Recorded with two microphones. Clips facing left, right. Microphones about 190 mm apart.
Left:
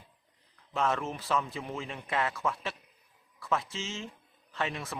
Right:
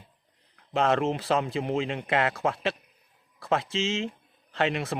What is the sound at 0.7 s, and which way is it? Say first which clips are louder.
A man's voice: right 7 dB; 75° right (ahead or behind).